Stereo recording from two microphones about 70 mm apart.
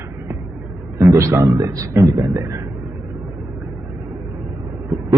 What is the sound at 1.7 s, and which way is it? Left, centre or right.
Speech, right.